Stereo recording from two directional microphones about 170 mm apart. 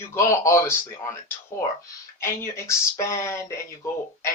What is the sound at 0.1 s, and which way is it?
Speech, 15° left (ahead or behind).